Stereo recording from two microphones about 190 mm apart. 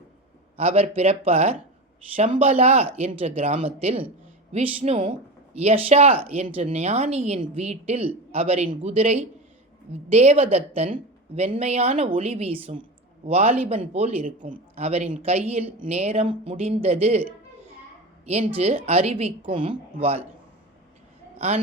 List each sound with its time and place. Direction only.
0.5 s a man's voice: 30° right (ahead or behind)
18.3 s a man's voice: 35° right (ahead or behind)
21.3 s a man's voice: 35° right (ahead or behind)